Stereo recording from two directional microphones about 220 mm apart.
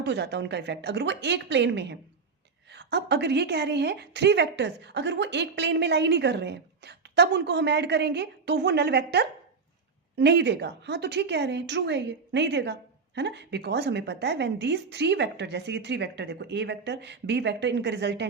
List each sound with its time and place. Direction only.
0.0 s a woman's voice: 50° right (ahead or behind)